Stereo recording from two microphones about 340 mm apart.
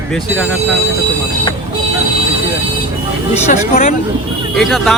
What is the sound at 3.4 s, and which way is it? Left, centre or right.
Speech, left.